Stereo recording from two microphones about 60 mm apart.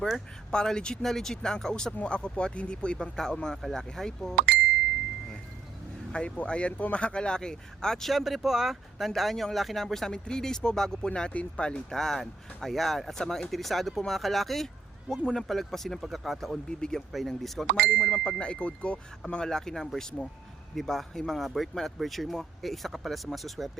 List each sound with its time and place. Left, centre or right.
0.0 s speech: centre
6.1 s speech: centre
8.1 s speech: centre
18.1 s speech: centre